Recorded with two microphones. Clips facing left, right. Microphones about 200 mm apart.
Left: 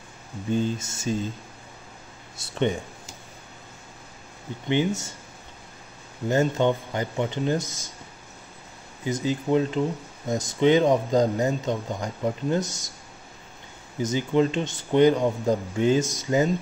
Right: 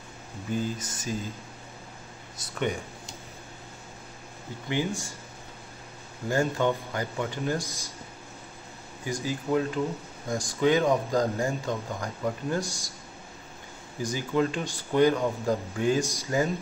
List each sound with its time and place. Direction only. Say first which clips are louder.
0.5 s speech: left 5 dB; 25° left (ahead or behind)
2.3 s speech: left 5 dB; 25° left (ahead or behind)
4.6 s speech: left 5 dB; 20° left (ahead or behind)
6.2 s speech: left 4 dB; 20° left (ahead or behind)
9.0 s speech: left 5 dB; 20° left (ahead or behind)
14.0 s speech: left 4 dB; 20° left (ahead or behind)